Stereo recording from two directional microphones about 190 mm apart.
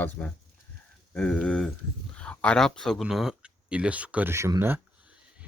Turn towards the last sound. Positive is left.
turn(degrees=-10)  # may be behind; listen again after turning